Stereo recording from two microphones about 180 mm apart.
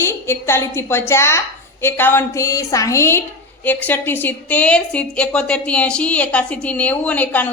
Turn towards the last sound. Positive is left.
turn(degrees=10)  # may be behind; listen again after turning